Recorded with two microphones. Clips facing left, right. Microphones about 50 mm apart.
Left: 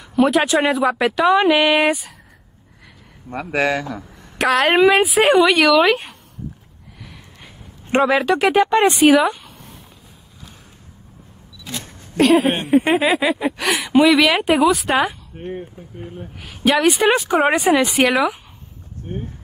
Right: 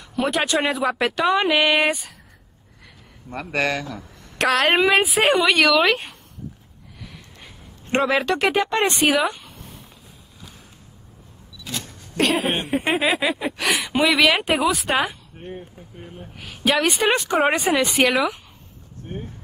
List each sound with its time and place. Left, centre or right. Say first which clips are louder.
0.0 s speech: left 7 dB; centre
3.3 s speech: left 4 dB; centre
7.9 s speech: left 4 dB; centre
12.2 s speech: left 6 dB; centre
15.5 s speech: left 6 dB; left
16.3 s speech: left 3 dB; centre